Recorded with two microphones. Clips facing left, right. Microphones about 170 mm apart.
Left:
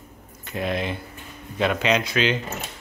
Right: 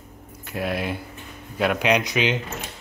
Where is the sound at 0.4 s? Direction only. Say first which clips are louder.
Even; 5° right (ahead or behind).